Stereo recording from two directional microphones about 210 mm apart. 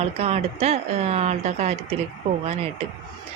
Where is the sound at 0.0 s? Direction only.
30° right (ahead or behind).